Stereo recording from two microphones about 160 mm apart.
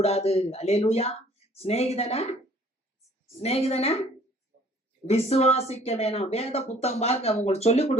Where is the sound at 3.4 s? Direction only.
40° left (ahead or behind).